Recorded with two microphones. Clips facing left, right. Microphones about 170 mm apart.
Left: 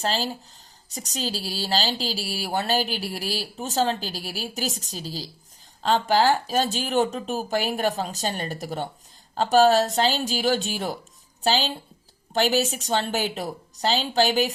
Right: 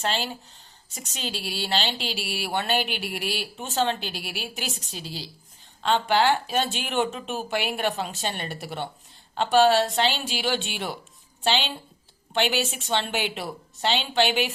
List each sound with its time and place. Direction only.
0.0 s speech: 35° left (ahead or behind)